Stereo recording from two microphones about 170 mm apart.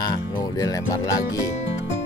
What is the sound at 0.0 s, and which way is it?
Speech, 25° left (ahead or behind).